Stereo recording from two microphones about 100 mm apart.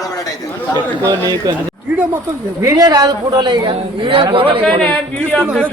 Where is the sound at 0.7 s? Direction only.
40° right (ahead or behind).